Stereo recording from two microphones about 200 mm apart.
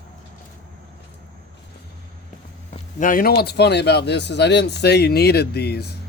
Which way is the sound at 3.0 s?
45° left (ahead or behind).